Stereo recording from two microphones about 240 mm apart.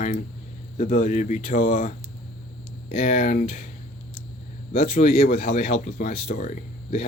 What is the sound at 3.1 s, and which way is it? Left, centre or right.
Speech, left.